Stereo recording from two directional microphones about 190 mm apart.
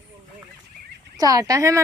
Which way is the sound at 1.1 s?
20° right (ahead or behind).